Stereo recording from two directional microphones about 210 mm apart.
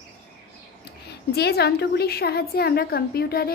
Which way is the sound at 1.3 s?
50° left (ahead or behind).